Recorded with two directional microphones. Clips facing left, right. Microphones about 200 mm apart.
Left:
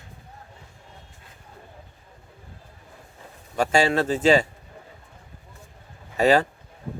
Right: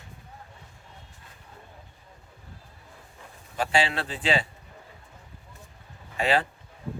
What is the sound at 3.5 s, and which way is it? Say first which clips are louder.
Speech: left 6 dB; 45° left (ahead or behind).